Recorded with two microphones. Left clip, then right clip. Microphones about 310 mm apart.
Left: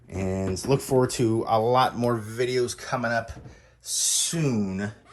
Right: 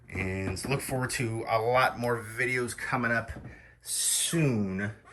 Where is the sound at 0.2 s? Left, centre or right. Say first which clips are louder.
Left 4 dB; left.